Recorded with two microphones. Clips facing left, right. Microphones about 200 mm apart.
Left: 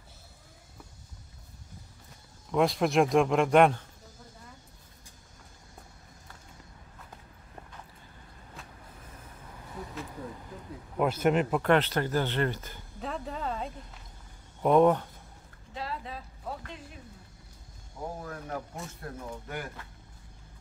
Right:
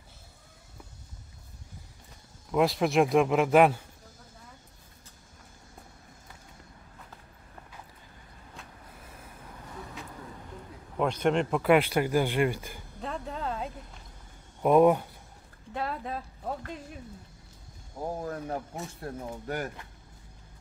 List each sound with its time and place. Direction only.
2.5 s speech: centre (ahead or behind)
8.6 s vehicle: centre (ahead or behind)
10.0 s vehicle: centre (ahead or behind)
11.0 s a man's voice: 5° left (ahead or behind)
11.6 s speech: 10° right (ahead or behind)
13.0 s a sound: centre (ahead or behind)
14.6 s speech: 5° right (ahead or behind)
15.7 s a sound: 55° right (ahead or behind)
18.2 s speech: 30° right (ahead or behind)